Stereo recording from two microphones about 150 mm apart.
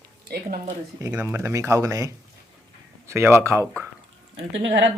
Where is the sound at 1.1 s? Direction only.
15° right (ahead or behind).